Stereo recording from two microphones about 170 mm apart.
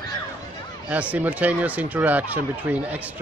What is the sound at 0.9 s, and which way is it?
Speech, 10° right (ahead or behind).